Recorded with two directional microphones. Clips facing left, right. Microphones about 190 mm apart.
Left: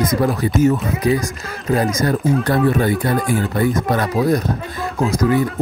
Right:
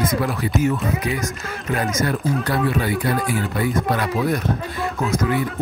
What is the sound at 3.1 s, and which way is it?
Speech, 5° right (ahead or behind).